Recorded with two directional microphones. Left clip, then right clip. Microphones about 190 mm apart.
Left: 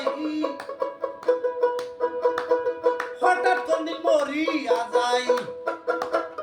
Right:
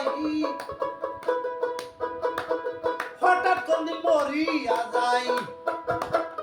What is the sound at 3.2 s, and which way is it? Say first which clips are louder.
Music: even; centre (ahead or behind).